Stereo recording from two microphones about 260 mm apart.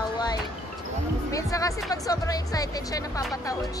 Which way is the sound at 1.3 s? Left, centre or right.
Centre.